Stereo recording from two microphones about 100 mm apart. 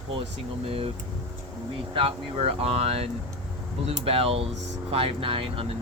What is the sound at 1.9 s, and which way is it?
Speech, 65° right (ahead or behind).